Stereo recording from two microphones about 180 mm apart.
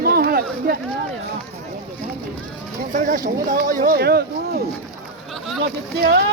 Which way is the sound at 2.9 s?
45° right (ahead or behind).